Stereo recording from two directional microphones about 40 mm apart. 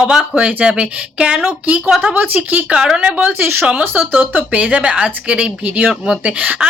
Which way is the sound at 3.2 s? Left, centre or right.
Right.